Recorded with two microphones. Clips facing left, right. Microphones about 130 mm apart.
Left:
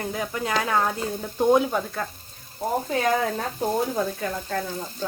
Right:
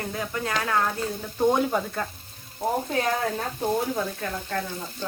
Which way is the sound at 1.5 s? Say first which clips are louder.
Left 3 dB; centre (ahead or behind).